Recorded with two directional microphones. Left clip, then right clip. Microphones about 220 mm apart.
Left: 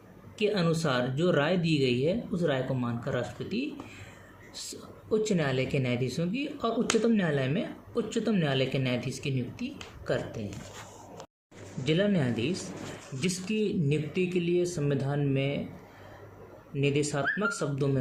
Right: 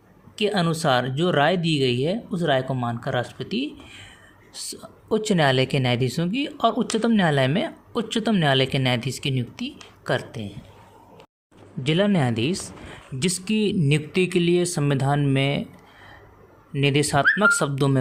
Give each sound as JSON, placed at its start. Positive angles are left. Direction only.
{"t": 0.3, "sound": "speech", "side_deg": -40}
{"t": 5.0, "sound": "speech", "side_deg": -40}
{"t": 11.8, "sound": "speech", "side_deg": -50}
{"t": 16.7, "sound": "speech", "side_deg": -45}